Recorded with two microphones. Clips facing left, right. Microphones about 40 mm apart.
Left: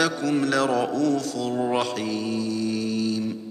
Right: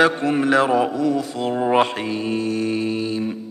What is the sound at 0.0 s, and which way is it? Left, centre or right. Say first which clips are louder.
Mantra: right 5 dB; right.